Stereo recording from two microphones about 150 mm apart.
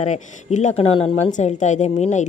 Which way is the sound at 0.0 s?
55° left (ahead or behind).